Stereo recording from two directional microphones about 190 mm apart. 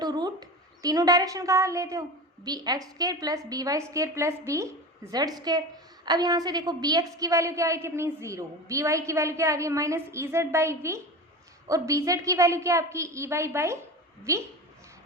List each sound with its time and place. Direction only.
0.0 s a woman's voice: 20° right (ahead or behind)